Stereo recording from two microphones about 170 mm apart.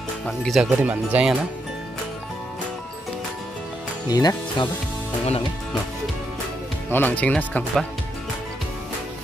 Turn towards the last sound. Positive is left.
turn(degrees=5)  # may be behind; listen again after turning